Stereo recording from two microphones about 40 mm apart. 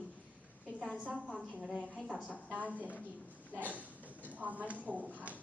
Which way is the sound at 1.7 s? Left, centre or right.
Left.